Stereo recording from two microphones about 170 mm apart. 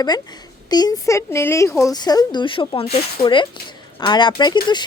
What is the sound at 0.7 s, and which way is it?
Speech, 25° left (ahead or behind).